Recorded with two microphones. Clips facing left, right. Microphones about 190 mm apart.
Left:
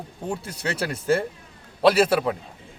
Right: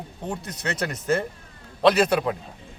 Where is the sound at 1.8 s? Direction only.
5° left (ahead or behind).